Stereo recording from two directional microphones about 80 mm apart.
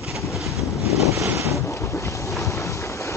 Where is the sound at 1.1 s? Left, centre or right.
Right.